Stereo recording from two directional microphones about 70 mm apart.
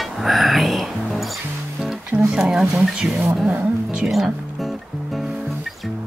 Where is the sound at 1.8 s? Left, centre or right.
Centre.